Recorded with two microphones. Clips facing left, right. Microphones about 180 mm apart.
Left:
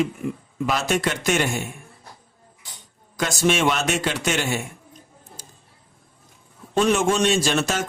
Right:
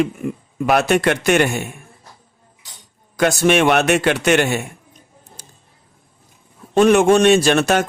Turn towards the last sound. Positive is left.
turn(degrees=-60)  # may be behind; listen again after turning